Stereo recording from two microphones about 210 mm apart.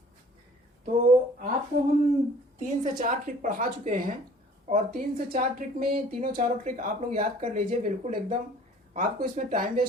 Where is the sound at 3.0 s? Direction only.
40° right (ahead or behind).